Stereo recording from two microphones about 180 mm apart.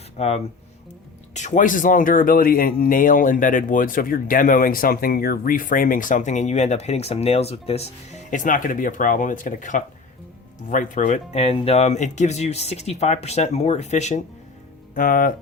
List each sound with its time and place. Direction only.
0.2 s speech: 35° left (ahead or behind)
14.9 s speech: 50° left (ahead or behind)